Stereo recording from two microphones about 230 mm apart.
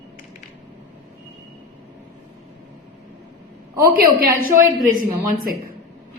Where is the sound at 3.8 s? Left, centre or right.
Right.